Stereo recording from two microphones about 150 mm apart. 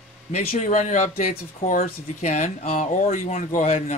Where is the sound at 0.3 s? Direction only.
45° left (ahead or behind).